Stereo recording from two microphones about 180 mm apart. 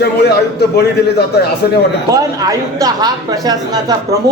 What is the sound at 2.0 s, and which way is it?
Speech, 20° right (ahead or behind).